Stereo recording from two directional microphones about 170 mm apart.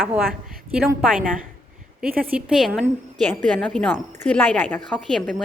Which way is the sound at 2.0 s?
60° right (ahead or behind).